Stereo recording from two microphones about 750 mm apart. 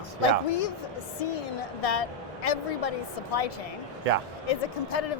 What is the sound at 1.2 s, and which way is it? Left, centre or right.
A woman's voice, left.